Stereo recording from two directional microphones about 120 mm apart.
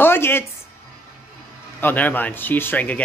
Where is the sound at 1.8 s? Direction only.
15° left (ahead or behind).